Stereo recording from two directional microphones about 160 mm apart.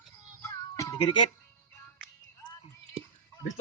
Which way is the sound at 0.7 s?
25° left (ahead or behind).